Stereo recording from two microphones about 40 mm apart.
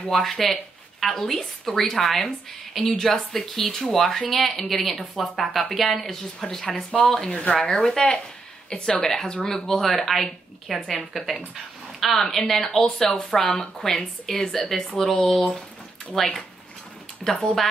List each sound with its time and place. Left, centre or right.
0.1 s speech: centre
7.2 s speech: left; by 17.6 s centre